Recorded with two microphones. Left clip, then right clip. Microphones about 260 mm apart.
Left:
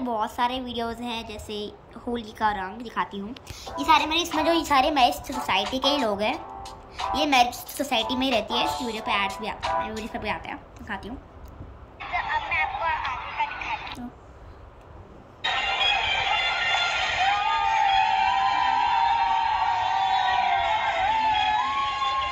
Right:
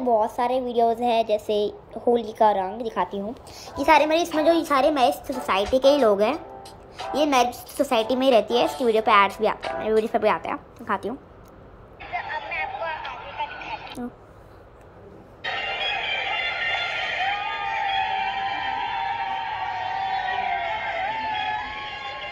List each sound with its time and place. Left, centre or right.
0.2 s a woman's voice: centre
4.4 s a woman's voice: centre
9.6 s speech: centre
9.8 s a woman's voice: centre
12.0 s vehicle: centre
15.4 s music: centre